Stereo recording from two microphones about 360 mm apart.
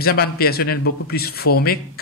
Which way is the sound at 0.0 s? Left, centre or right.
Left.